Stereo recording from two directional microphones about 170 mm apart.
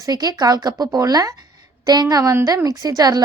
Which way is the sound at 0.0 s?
20° right (ahead or behind).